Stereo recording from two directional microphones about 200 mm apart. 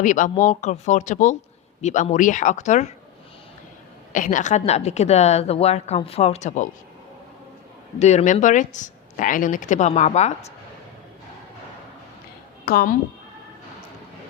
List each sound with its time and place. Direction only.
0.0 s a woman's voice: 40° left (ahead or behind)
4.1 s a woman's voice: 40° left (ahead or behind)
7.9 s a woman's voice: 35° left (ahead or behind)
12.6 s a woman's voice: 45° left (ahead or behind)